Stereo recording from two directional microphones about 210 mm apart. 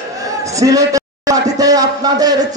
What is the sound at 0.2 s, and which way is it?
A man's voice, 15° right (ahead or behind).